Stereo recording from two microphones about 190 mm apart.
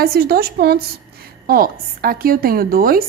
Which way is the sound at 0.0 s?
55° right (ahead or behind).